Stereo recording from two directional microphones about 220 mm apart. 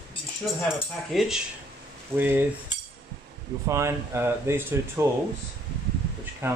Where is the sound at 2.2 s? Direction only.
10° right (ahead or behind).